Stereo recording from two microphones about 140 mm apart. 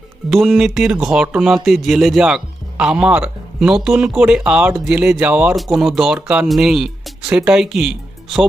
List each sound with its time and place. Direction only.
0.3 s speech: centre (ahead or behind)